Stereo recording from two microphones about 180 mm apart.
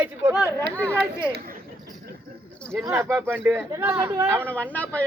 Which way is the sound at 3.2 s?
10° right (ahead or behind).